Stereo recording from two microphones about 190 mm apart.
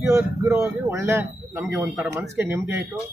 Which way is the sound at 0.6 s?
15° right (ahead or behind).